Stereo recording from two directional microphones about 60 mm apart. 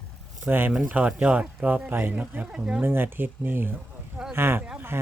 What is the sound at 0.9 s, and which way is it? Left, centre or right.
Speech, right.